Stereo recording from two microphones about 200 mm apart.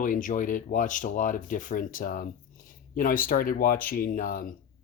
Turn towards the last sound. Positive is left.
turn(degrees=45)  # may be behind; listen again after turning